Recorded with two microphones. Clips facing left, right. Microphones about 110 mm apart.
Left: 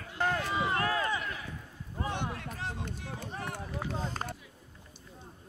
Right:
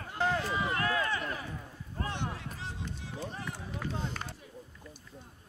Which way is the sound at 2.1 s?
55° left (ahead or behind).